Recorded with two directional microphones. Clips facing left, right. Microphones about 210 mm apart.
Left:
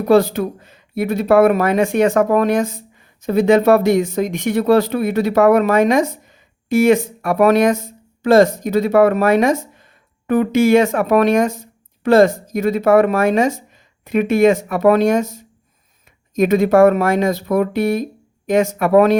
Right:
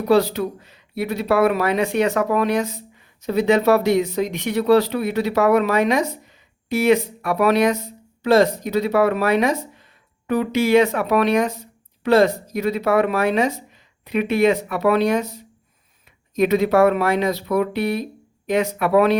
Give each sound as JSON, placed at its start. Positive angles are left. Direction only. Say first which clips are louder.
{"t": 0.1, "sound": "speech", "louder": "left 4 dB", "side_deg": 50}